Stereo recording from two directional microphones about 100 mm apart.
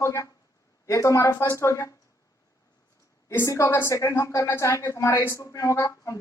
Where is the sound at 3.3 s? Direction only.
30° left (ahead or behind).